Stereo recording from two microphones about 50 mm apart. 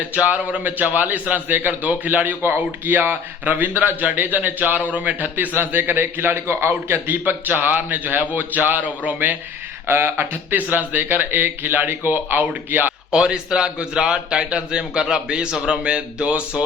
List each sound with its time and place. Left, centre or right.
0.0 s speech: right
9.8 s speech: right
10.5 s speech: right
13.1 s a man's voice: centre